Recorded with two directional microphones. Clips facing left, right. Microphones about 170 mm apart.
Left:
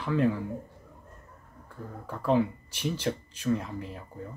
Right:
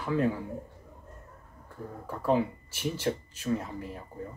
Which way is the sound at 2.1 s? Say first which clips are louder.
Left 1 dB; 5° right (ahead or behind).